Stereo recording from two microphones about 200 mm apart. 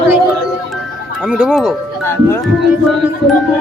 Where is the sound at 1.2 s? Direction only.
5° right (ahead or behind).